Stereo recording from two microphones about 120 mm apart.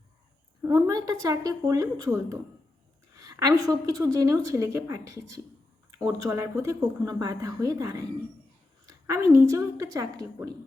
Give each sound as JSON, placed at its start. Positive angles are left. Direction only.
{"t": 0.6, "sound": "a woman's voice", "side_deg": -30}